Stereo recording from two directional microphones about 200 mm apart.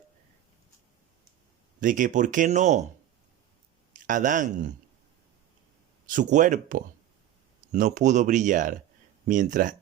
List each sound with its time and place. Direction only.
1.8 s speech: 40° right (ahead or behind)
3.9 s speech: 40° right (ahead or behind)
6.1 s speech: 40° right (ahead or behind)